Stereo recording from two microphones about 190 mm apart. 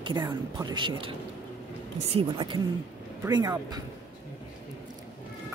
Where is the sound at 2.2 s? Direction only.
25° right (ahead or behind).